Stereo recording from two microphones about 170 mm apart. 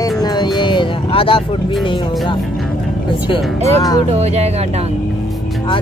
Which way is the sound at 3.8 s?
20° left (ahead or behind).